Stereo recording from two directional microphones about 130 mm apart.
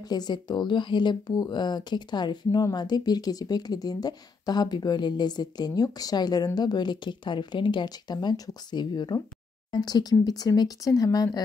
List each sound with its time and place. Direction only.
0.1 s speech: 35° left (ahead or behind)